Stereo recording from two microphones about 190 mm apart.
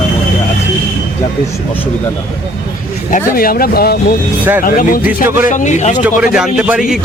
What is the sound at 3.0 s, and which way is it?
A man's voice, 45° left (ahead or behind).